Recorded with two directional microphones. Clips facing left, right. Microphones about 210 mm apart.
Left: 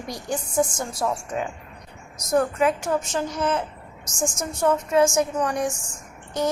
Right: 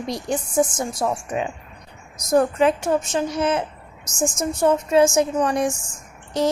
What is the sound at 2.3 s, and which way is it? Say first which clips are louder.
A child's voice: right 3 dB; 30° right (ahead or behind).